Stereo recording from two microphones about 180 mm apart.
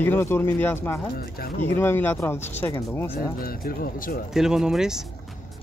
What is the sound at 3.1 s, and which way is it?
Speech, 55° left (ahead or behind).